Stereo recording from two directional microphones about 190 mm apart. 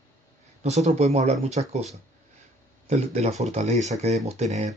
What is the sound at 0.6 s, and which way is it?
Speech, 35° right (ahead or behind).